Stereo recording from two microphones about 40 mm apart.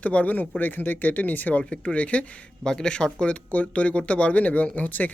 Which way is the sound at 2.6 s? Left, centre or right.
Left.